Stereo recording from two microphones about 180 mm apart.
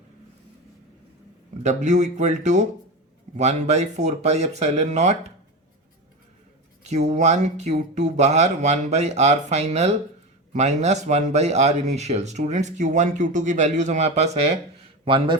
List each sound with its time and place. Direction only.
1.6 s speech: 40° right (ahead or behind)
6.8 s a man's voice: 40° right (ahead or behind)